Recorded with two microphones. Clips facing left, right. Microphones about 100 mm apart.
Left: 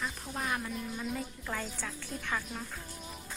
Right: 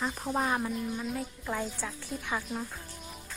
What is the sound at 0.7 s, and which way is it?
A woman's voice, 15° right (ahead or behind).